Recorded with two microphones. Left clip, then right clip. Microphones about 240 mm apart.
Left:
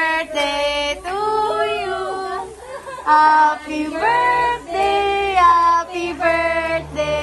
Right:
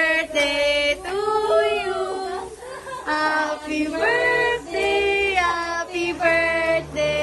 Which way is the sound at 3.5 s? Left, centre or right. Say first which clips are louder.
Left 2 dB; left.